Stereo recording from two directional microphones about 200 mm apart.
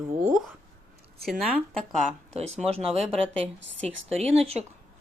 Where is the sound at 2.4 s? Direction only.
30° right (ahead or behind).